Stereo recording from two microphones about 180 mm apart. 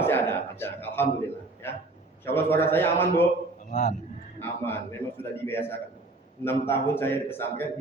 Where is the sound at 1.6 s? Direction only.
10° left (ahead or behind).